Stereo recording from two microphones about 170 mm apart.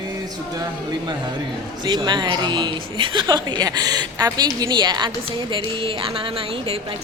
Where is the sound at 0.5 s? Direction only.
25° right (ahead or behind).